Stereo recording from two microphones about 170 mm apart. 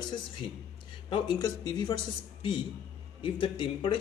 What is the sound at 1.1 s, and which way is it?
Speech, 25° left (ahead or behind).